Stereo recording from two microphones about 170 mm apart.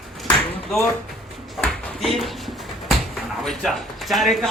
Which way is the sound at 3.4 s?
Centre (ahead or behind).